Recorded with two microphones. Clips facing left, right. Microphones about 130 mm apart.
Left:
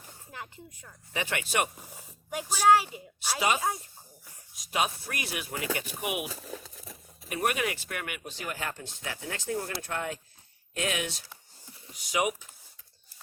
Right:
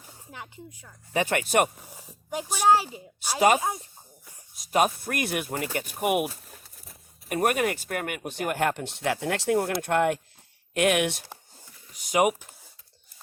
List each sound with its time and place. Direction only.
0.0 s a sound: 15° right (ahead or behind)
1.1 s speech: 45° right (ahead or behind)
1.9 s speech: 15° right (ahead or behind)
2.4 s speech: 25° right (ahead or behind)
3.2 s speech: 45° right (ahead or behind)
6.3 s crumpling: 90° left
7.3 s speech: 45° right (ahead or behind); by 11.3 s 65° right (ahead or behind)
11.9 s speech: 50° right (ahead or behind)